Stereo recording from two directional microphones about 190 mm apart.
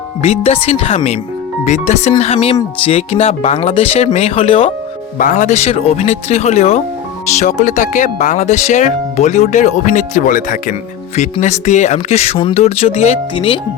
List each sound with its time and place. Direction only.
0.2 s speech: 30° left (ahead or behind)
5.1 s speech: 45° left (ahead or behind); by 13.6 s 25° left (ahead or behind)